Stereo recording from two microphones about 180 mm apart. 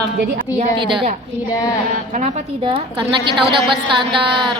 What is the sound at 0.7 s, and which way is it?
Speech, 25° right (ahead or behind).